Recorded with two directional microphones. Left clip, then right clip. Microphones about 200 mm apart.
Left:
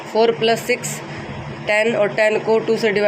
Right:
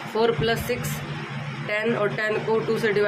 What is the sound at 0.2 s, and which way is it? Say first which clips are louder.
Speech: left 7 dB; 25° left (ahead or behind).